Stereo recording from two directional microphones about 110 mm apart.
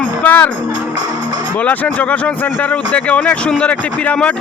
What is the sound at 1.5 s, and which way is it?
Speech, 15° left (ahead or behind).